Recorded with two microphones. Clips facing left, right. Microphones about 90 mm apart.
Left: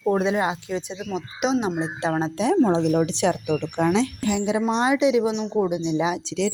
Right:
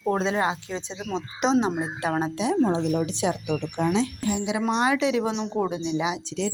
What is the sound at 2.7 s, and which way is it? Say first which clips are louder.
A woman's voice: left 4 dB; 75° left (ahead or behind).